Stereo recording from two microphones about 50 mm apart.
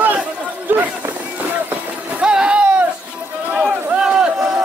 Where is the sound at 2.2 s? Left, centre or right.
Centre.